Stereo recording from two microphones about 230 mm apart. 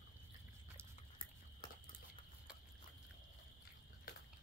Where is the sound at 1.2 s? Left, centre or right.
Left.